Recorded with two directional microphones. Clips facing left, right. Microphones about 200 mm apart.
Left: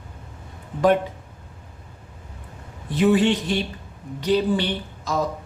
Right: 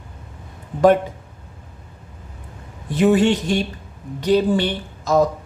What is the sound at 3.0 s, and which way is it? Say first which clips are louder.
A woman's voice: right 3 dB; 45° right (ahead or behind).